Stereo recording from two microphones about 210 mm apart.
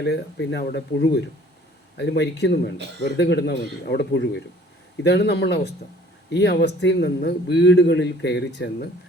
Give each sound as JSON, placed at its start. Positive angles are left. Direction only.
{"t": 0.0, "sound": "a man's voice", "side_deg": 55}